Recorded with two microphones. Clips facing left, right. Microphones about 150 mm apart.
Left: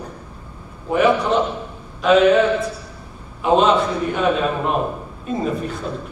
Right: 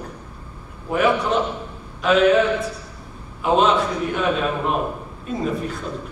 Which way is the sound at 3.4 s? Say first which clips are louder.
Left 2 dB; centre (ahead or behind).